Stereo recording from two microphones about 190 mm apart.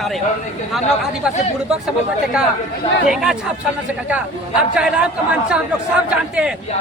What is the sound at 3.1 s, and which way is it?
Speech, 5° right (ahead or behind).